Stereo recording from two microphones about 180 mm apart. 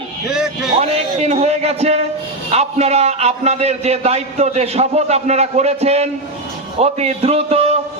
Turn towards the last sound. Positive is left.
turn(degrees=-35)  # may be behind; listen again after turning